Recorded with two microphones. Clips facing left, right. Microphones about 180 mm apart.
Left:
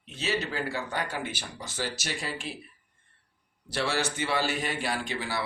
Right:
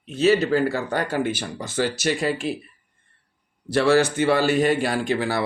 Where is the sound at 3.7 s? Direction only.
50° right (ahead or behind).